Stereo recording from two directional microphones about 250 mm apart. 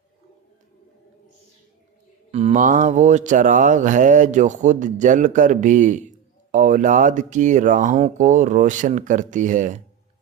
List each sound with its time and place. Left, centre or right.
2.3 s speech: right